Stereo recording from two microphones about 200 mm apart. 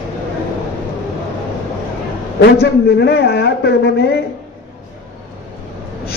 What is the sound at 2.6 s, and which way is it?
Speech, 55° left (ahead or behind).